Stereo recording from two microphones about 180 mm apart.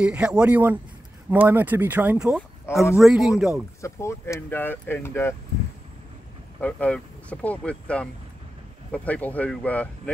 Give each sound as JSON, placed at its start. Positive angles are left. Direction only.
{"t": 0.0, "sound": "speech", "side_deg": -5}
{"t": 2.7, "sound": "speech", "side_deg": 15}
{"t": 3.0, "sound": "speech", "side_deg": 0}
{"t": 3.8, "sound": "speech", "side_deg": 15}
{"t": 6.6, "sound": "speech", "side_deg": 10}